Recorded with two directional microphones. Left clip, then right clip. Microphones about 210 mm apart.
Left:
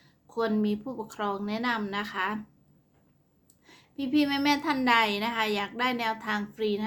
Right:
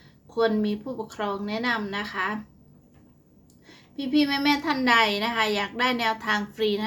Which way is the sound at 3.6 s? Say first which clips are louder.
Right 2 dB; 10° left (ahead or behind).